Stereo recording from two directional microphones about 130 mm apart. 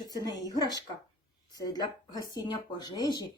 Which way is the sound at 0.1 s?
30° left (ahead or behind).